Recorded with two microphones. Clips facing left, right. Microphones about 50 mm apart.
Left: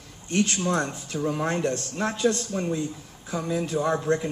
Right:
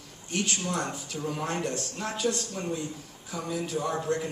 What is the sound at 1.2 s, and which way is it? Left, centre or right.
A man's voice, left.